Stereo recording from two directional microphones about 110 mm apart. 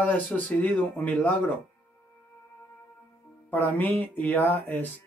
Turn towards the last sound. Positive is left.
turn(degrees=15)  # may be behind; listen again after turning